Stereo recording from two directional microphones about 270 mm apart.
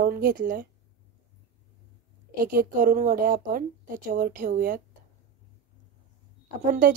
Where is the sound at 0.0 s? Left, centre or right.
Right.